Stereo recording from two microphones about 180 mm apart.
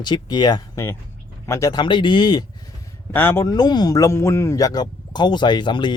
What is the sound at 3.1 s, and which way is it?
Speech, 10° left (ahead or behind).